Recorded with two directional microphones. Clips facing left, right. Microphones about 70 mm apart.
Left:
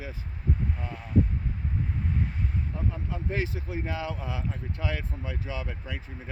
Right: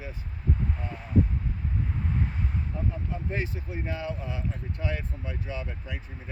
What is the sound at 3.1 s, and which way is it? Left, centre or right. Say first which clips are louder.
Speech: left 1 dB; left.